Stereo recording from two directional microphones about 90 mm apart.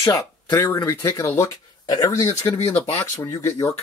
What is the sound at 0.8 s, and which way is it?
Speech, 35° left (ahead or behind).